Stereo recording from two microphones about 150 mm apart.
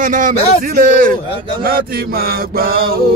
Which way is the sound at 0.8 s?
60° right (ahead or behind).